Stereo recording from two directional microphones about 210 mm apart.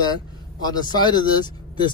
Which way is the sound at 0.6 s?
20° left (ahead or behind).